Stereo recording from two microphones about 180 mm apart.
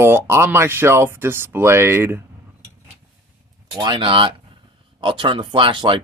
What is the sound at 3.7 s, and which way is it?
Speech, 25° right (ahead or behind).